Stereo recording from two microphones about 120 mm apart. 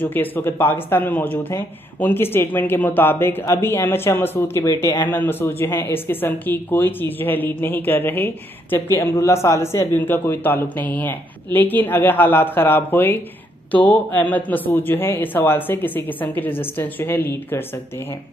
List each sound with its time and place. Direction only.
0.0 s a man's voice: 15° left (ahead or behind)
5.0 s a man's voice: 15° left (ahead or behind)